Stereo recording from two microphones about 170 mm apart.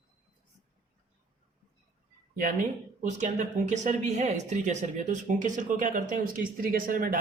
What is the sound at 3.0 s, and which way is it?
Speech, 45° right (ahead or behind).